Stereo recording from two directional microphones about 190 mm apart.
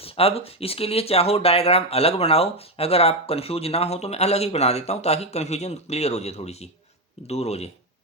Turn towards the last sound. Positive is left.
turn(degrees=35)  # may be behind; listen again after turning